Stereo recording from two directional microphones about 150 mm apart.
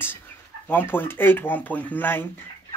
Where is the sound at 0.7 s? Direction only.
15° left (ahead or behind).